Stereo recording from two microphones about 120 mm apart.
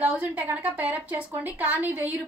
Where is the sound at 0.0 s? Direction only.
10° right (ahead or behind).